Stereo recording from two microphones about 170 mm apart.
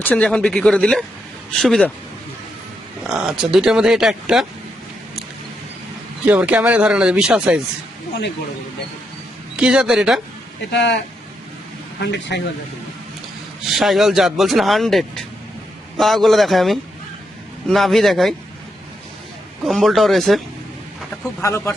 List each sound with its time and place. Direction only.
0.0 s speech: 5° left (ahead or behind)
3.2 s speech: 5° right (ahead or behind)
6.2 s speech: 10° right (ahead or behind)
9.6 s speech: 5° right (ahead or behind)
10.7 s speech: 90° left
11.9 s speech: 80° left
13.7 s speech: centre (ahead or behind)
19.6 s speech: centre (ahead or behind)
21.4 s a man's voice: 15° left (ahead or behind)